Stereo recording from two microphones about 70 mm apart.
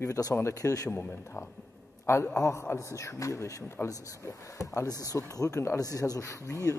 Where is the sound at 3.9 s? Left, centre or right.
Left.